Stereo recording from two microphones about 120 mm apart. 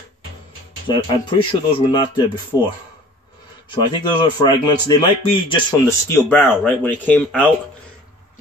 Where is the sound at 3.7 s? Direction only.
35° left (ahead or behind).